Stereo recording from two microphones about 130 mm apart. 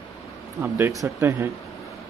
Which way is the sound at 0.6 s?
20° right (ahead or behind).